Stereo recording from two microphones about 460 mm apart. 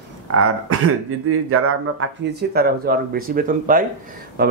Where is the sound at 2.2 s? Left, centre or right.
Centre.